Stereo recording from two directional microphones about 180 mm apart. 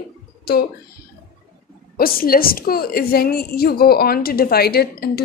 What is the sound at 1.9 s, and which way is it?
Speech, 55° left (ahead or behind).